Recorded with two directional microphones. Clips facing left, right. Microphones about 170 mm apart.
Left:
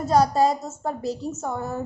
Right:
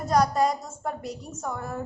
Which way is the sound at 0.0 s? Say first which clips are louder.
Left 3 dB; 25° left (ahead or behind).